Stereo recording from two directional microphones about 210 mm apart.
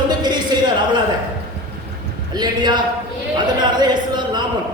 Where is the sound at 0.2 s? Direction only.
20° right (ahead or behind).